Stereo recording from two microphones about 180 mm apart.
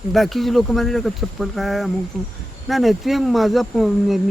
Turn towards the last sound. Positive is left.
turn(degrees=0)  # may be behind; listen again after turning